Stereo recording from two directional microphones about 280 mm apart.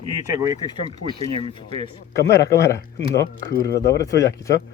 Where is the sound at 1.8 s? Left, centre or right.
Centre.